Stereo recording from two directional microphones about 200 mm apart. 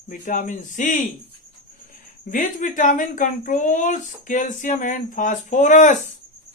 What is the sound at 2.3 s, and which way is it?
Speech, 40° left (ahead or behind).